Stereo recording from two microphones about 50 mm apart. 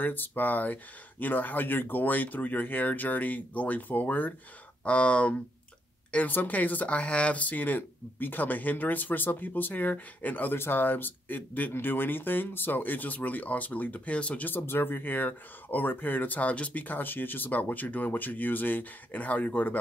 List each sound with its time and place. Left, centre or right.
0.0 s speech: left
4.8 s speech: left
6.1 s speech: left
14.5 s speech: left